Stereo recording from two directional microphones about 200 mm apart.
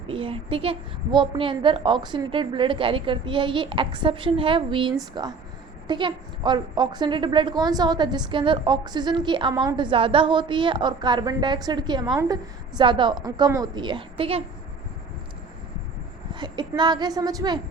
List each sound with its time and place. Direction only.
0.1 s a woman's voice: 30° right (ahead or behind)
16.3 s a woman's voice: 25° right (ahead or behind)